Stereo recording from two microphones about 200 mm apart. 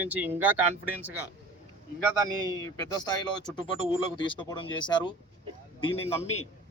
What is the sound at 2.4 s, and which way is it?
Speech, 20° left (ahead or behind).